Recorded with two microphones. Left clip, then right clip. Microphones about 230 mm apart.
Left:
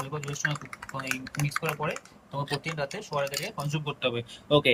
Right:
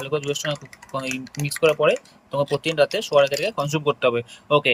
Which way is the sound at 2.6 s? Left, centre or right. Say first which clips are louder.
Right 13 dB; right.